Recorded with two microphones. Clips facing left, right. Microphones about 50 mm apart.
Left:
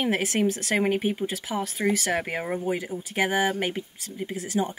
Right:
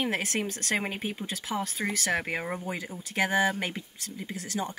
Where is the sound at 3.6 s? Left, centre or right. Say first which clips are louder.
Left 5 dB; left.